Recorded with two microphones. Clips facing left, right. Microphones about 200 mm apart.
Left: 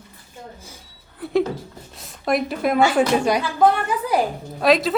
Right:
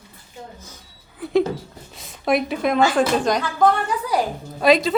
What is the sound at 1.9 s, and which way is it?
A woman's voice, centre (ahead or behind).